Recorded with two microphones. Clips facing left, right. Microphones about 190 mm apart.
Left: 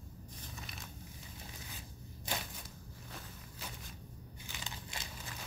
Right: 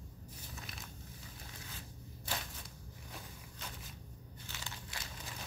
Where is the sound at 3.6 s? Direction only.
Centre (ahead or behind).